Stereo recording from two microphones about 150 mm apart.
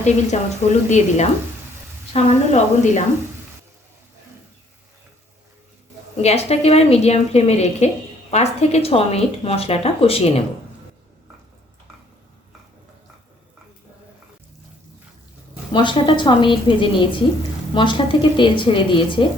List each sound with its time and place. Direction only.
0.3 s a woman's voice: 55° left (ahead or behind)
6.2 s a woman's voice: 45° left (ahead or behind)
15.7 s speech: 30° left (ahead or behind)